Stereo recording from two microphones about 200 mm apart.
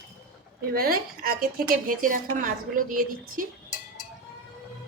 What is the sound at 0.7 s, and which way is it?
A woman's voice, 50° right (ahead or behind).